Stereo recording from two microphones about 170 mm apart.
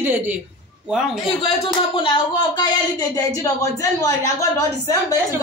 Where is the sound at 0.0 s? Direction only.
10° right (ahead or behind).